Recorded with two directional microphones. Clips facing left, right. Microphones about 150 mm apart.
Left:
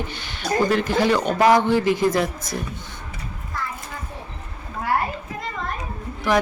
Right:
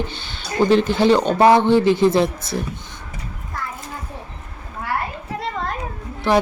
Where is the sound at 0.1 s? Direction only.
30° right (ahead or behind).